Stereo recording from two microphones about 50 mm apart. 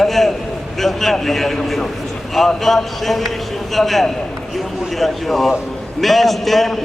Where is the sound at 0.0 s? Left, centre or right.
Centre.